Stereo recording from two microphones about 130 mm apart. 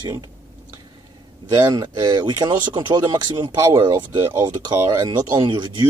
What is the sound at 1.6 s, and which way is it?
Speech, 35° right (ahead or behind).